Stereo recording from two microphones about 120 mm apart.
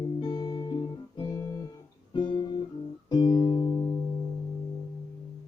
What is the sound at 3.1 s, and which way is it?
Music, 40° left (ahead or behind).